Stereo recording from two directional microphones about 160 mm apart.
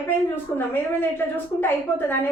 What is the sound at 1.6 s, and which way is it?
Speech, 15° left (ahead or behind).